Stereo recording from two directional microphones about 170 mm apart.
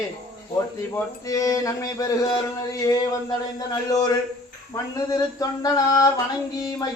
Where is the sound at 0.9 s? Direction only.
20° left (ahead or behind).